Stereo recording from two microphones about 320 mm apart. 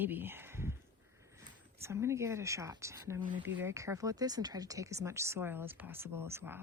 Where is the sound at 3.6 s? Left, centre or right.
Centre.